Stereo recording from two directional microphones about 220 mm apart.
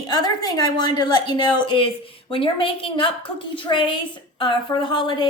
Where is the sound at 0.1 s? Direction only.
20° left (ahead or behind).